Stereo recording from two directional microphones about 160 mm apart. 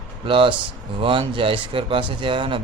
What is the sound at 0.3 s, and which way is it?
Speech, 30° right (ahead or behind).